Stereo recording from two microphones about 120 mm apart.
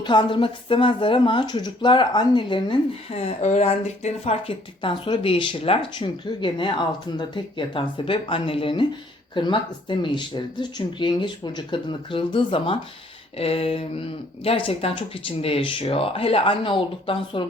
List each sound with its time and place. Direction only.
0.0 s speech: 40° left (ahead or behind)
3.1 s speech: 60° left (ahead or behind)